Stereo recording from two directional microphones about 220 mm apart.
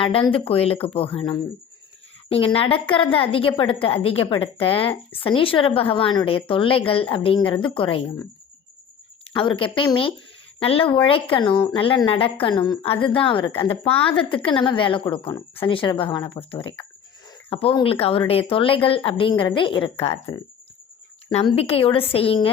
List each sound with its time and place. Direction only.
0.0 s a woman's voice: 25° left (ahead or behind)
9.2 s a woman's voice: 25° left (ahead or behind)